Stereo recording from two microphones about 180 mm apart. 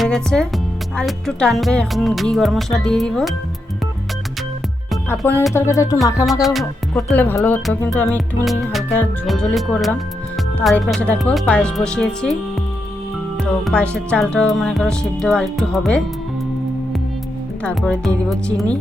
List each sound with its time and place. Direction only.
0.0 s speech: 5° left (ahead or behind)
0.9 s music: 5° left (ahead or behind)
5.2 s speech: 15° left (ahead or behind)
6.4 s speech: centre (ahead or behind)
7.9 s music: 5° left (ahead or behind)
13.4 s music: 5° left (ahead or behind)
17.6 s speech: 5° left (ahead or behind)